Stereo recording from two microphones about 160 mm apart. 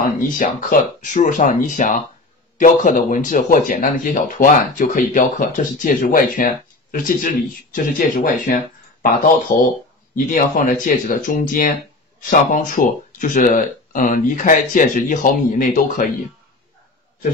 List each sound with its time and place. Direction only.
0.0 s speech: 60° left (ahead or behind)